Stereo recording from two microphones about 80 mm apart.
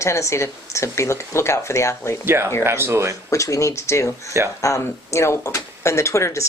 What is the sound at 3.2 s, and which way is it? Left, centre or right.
Speech, left.